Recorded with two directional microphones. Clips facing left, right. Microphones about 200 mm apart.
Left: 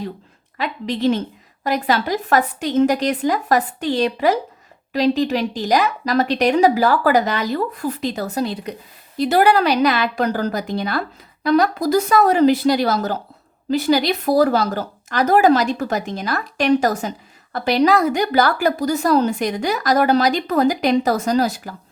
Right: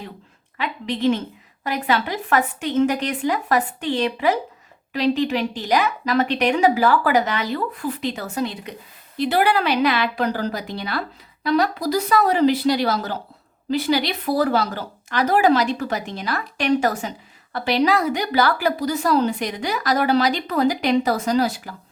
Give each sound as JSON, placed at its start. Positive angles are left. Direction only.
{"t": 0.5, "sound": "a woman's voice", "side_deg": 40}